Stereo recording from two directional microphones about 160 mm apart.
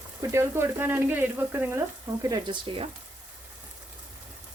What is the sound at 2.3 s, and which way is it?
Speech, 30° right (ahead or behind).